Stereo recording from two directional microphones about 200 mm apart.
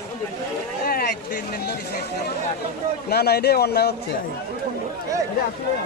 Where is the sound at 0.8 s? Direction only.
50° left (ahead or behind).